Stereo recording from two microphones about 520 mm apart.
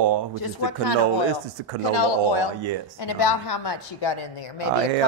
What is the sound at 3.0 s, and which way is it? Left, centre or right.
A woman's voice, left.